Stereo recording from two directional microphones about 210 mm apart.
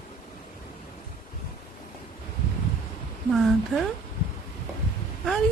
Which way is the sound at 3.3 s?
Centre (ahead or behind).